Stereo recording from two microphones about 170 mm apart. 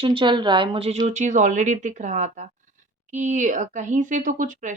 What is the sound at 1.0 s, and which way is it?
Speech, 45° right (ahead or behind).